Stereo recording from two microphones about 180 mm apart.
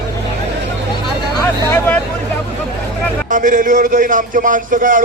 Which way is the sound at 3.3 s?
45° right (ahead or behind).